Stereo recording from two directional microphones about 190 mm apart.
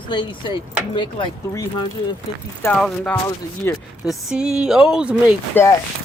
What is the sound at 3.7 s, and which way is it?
Speech, 10° left (ahead or behind).